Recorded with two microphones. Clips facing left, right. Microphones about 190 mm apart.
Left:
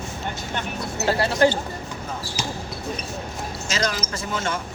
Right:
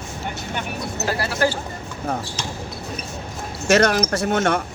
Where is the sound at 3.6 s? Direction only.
65° right (ahead or behind).